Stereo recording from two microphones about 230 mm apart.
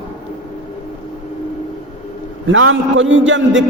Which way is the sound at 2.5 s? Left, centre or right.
Right.